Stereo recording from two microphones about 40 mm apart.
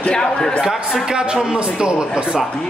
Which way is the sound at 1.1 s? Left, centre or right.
Right.